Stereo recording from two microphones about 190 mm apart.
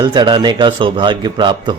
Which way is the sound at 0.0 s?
25° right (ahead or behind).